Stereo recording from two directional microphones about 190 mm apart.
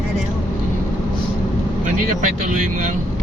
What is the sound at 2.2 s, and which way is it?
Speech, 45° right (ahead or behind).